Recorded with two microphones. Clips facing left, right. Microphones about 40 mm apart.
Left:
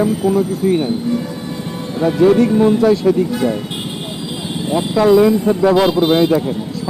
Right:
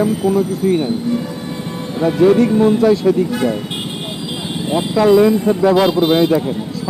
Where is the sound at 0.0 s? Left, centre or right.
Centre.